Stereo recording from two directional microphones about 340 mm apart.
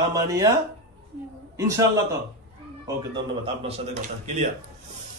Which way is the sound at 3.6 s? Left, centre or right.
Centre.